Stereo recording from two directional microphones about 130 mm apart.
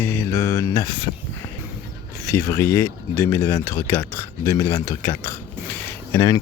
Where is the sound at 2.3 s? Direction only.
25° left (ahead or behind).